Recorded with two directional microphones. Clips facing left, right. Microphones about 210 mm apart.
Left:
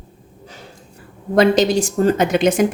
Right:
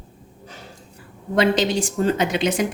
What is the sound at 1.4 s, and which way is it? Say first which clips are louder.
A woman's voice: left 5 dB; 40° left (ahead or behind).